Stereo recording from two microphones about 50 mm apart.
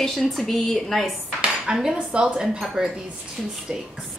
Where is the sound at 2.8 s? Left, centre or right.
Centre.